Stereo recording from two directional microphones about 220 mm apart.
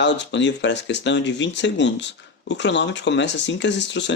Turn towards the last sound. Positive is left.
turn(degrees=55)  # may be behind; listen again after turning